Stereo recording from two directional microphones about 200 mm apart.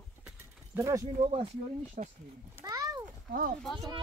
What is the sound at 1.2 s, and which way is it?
Speech, 30° right (ahead or behind).